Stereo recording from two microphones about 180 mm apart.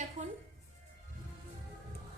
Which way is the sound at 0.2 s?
45° right (ahead or behind).